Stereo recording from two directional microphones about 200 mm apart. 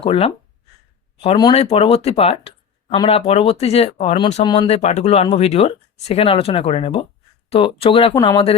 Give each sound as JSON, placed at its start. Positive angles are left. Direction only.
{"t": 0.0, "sound": "speech", "side_deg": 25}